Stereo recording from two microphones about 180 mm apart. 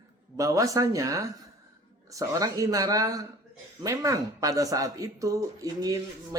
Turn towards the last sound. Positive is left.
turn(degrees=-20)  # may be behind; listen again after turning